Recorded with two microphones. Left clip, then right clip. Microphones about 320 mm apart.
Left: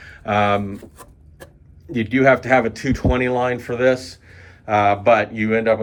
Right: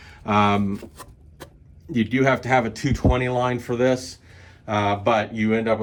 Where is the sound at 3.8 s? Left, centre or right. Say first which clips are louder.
Left 5 dB; centre.